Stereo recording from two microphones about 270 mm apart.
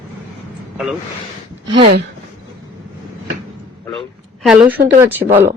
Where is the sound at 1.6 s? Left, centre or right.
Centre.